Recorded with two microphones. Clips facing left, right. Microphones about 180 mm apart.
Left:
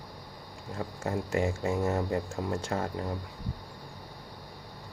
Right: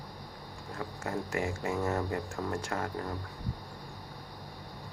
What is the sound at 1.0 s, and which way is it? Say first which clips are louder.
Speech: left 4 dB; 25° left (ahead or behind).